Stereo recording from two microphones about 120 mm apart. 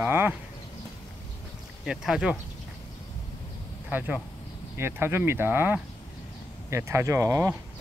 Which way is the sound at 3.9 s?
15° right (ahead or behind).